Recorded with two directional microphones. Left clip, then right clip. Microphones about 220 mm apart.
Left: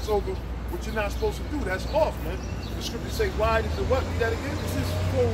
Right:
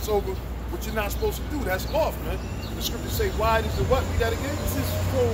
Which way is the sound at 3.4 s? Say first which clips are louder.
Right 2 dB; 15° right (ahead or behind).